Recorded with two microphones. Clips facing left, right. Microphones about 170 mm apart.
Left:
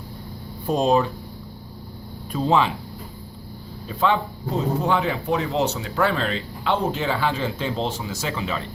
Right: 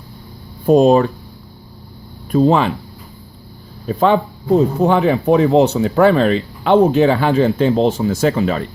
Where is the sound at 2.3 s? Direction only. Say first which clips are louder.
Right 7 dB; 55° right (ahead or behind).